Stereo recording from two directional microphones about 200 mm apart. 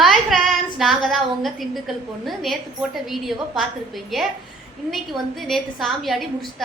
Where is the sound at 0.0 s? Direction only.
Centre (ahead or behind).